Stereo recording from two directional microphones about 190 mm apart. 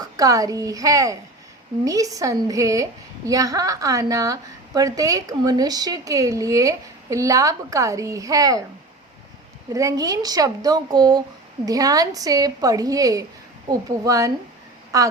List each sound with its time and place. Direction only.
0.0 s a woman's voice: 20° right (ahead or behind)
9.7 s a woman's voice: 15° right (ahead or behind)